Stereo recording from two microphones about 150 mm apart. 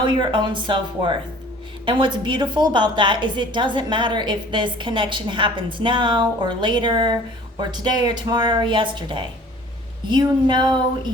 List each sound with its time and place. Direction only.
0.0 s a woman's voice: 30° right (ahead or behind)